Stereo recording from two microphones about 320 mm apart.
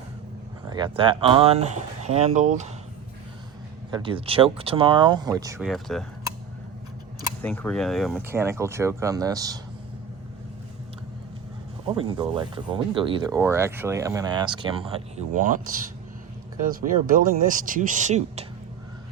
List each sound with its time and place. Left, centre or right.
0.7 s speech: centre
3.9 s speech: centre
5.5 s speech: centre
7.4 s speech: centre
11.9 s speech: centre
16.6 s speech: right